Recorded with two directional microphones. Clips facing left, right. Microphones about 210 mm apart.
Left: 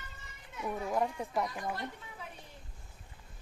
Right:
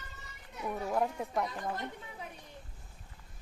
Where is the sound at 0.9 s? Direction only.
Centre (ahead or behind).